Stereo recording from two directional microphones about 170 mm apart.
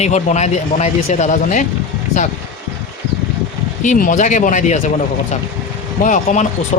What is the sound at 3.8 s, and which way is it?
Speech, 50° left (ahead or behind).